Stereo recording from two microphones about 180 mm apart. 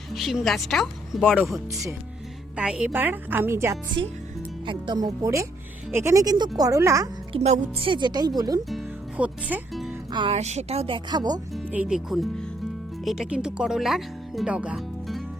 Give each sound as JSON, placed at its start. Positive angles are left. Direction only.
{"t": 0.1, "sound": "speech", "side_deg": 0}
{"t": 4.6, "sound": "a woman's voice", "side_deg": -25}
{"t": 7.3, "sound": "a woman's voice", "side_deg": -35}
{"t": 8.7, "sound": "speech", "side_deg": -5}
{"t": 10.1, "sound": "a woman's voice", "side_deg": -30}
{"t": 11.5, "sound": "speech", "side_deg": -5}